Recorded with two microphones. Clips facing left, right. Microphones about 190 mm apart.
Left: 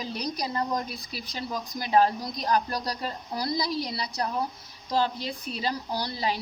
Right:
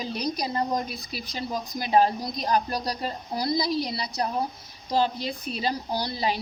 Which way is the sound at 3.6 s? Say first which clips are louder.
Right 3 dB; 75° right (ahead or behind).